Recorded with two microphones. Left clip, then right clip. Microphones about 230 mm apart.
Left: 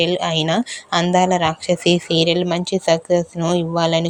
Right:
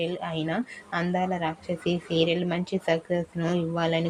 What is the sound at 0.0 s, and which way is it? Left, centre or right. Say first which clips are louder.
Speech: left 12 dB; left.